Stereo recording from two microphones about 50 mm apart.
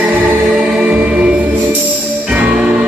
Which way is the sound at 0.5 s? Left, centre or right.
Right.